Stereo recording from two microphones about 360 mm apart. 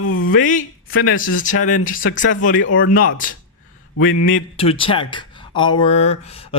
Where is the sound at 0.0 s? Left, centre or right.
Left.